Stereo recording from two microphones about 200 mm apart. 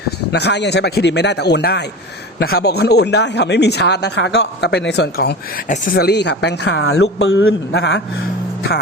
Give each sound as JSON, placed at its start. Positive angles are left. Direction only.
{"t": 0.3, "sound": "speech", "side_deg": 55}